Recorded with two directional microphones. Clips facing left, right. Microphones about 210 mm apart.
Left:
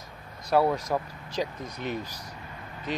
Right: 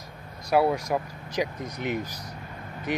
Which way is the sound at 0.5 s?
10° right (ahead or behind).